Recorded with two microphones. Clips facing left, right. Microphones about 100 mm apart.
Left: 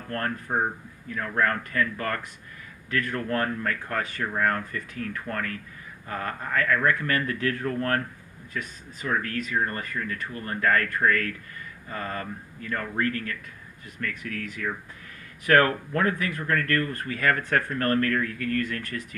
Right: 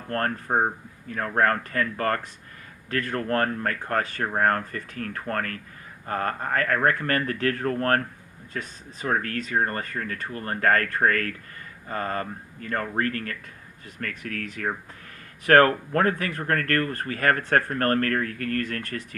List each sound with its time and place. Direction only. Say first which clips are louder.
0.1 s speech: right 3 dB; 40° right (ahead or behind)